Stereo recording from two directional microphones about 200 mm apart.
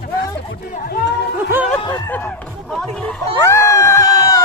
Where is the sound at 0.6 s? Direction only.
45° left (ahead or behind).